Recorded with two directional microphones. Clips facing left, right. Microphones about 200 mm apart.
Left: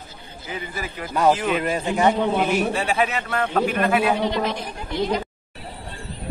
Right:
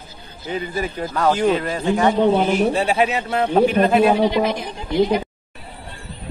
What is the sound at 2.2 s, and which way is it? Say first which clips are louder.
Speech: right 5 dB; 30° right (ahead or behind).